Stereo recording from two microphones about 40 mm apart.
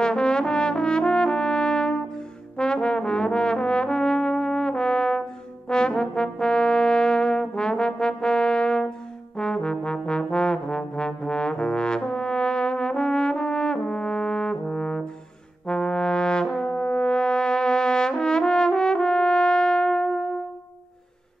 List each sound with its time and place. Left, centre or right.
0.0 s brass instrument: left
9.4 s trombone: left
15.6 s brass instrument: centre